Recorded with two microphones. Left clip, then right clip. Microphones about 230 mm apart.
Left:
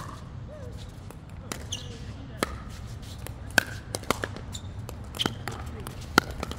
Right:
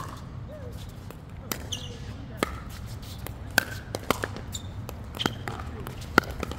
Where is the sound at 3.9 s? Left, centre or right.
Left.